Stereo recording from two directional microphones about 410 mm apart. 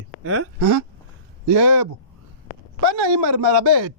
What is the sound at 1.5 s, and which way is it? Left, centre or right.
Speech, right.